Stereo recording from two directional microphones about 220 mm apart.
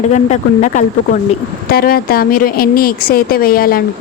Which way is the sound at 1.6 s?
45° left (ahead or behind).